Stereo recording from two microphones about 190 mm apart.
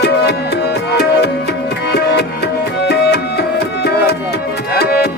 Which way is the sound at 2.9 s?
60° left (ahead or behind).